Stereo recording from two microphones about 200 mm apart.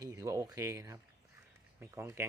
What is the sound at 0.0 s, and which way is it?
Speech, 15° right (ahead or behind).